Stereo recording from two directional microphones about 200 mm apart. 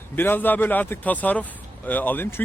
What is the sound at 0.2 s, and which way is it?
Speech, 10° left (ahead or behind).